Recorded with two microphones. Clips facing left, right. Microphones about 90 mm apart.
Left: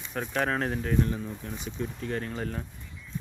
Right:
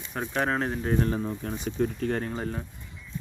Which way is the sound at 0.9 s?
45° right (ahead or behind).